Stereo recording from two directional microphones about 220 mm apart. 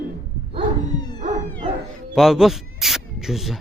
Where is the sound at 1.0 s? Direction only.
20° left (ahead or behind).